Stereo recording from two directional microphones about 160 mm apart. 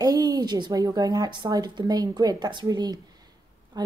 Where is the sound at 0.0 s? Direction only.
25° right (ahead or behind).